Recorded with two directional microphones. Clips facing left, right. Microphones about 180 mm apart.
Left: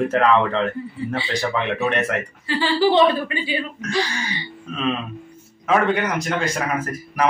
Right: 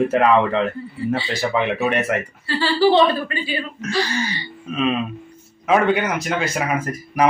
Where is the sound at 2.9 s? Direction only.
15° left (ahead or behind).